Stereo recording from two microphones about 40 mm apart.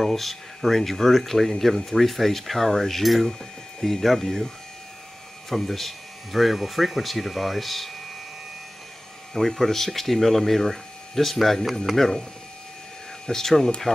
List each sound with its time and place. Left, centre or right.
0.0 s speech: centre
5.5 s speech: centre
9.3 s speech: centre
13.3 s speech: centre
13.9 s speech: left